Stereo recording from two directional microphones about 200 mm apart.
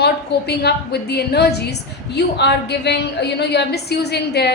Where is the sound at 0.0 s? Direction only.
55° left (ahead or behind).